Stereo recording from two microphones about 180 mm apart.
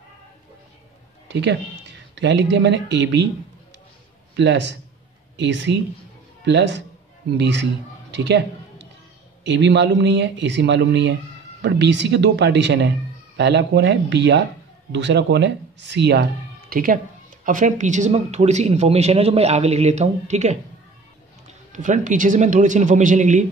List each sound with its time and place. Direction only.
1.3 s speech: 70° right (ahead or behind)
4.4 s a man's voice: 80° right
8.1 s a sound: 75° right (ahead or behind)
9.5 s speech: 75° right (ahead or behind); by 23.4 s 40° right (ahead or behind)